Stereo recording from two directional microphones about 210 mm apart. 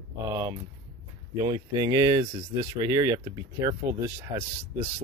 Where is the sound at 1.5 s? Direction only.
20° right (ahead or behind).